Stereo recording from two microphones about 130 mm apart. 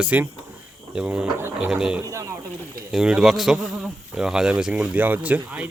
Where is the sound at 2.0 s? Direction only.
25° right (ahead or behind).